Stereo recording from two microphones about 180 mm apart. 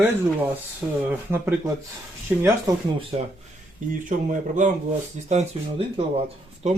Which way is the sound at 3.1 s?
30° right (ahead or behind).